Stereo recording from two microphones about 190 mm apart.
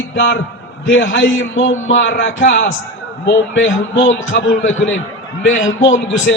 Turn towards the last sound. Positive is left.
turn(degrees=80)